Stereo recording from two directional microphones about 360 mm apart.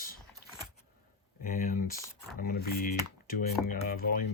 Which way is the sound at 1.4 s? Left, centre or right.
Left.